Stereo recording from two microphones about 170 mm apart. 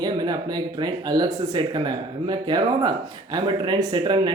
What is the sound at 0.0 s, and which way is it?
Speech, 25° right (ahead or behind).